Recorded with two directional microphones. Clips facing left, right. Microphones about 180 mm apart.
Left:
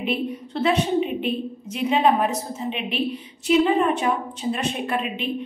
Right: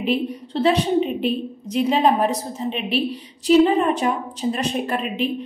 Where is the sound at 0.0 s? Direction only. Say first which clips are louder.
Right 3 dB; 35° right (ahead or behind).